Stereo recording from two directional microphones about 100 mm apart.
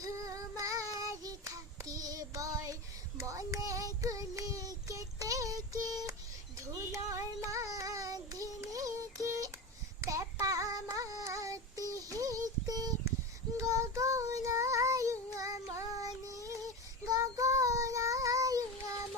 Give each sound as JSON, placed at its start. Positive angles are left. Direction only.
{"t": 0.0, "sound": "child singing", "side_deg": -35}
{"t": 10.8, "sound": "a sound", "side_deg": -35}
{"t": 13.6, "sound": "child singing", "side_deg": -30}